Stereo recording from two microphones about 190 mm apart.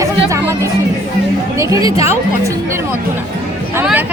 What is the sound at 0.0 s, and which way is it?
Chatter, 15° right (ahead or behind).